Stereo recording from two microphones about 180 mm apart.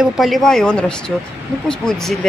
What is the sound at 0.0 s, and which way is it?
Speech, centre (ahead or behind).